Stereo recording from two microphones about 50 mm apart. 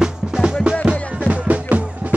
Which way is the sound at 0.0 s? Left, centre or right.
Centre.